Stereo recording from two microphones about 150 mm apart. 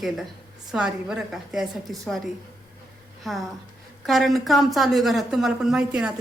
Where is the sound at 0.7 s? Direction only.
5° right (ahead or behind).